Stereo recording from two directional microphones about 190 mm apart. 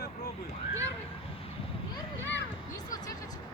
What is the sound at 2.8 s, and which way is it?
Music, 20° left (ahead or behind).